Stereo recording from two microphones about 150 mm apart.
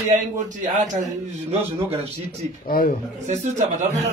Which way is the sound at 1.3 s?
45° right (ahead or behind).